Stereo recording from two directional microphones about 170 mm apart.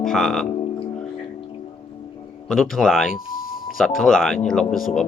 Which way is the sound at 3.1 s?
55° left (ahead or behind).